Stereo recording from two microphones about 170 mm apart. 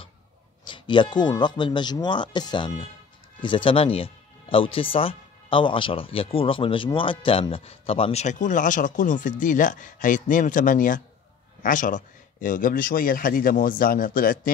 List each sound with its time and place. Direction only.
0.7 s a man's voice: 30° left (ahead or behind); by 14.5 s 55° left (ahead or behind)